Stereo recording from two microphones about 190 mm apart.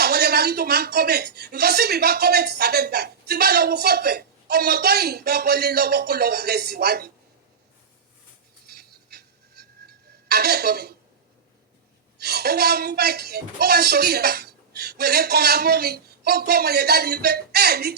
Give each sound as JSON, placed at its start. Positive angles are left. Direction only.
{"t": 0.0, "sound": "speech", "side_deg": -55}
{"t": 8.6, "sound": "music", "side_deg": -55}
{"t": 12.2, "sound": "speech", "side_deg": -55}